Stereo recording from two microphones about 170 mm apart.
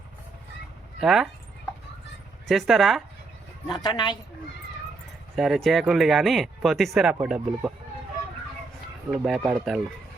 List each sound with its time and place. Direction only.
0.9 s speech: centre (ahead or behind)
2.5 s speech: centre (ahead or behind)
3.8 s speech: 25° left (ahead or behind)
5.4 s speech: centre (ahead or behind)
9.0 s speech: centre (ahead or behind)